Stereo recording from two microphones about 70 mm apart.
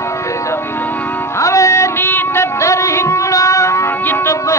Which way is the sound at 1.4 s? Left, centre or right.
Left.